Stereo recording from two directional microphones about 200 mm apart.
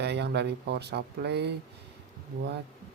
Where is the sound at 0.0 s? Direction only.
55° right (ahead or behind).